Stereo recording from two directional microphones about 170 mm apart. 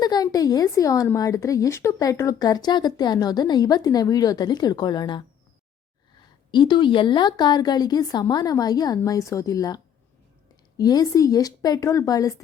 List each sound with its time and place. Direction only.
0.0 s speech: 25° left (ahead or behind)
6.5 s speech: 25° left (ahead or behind)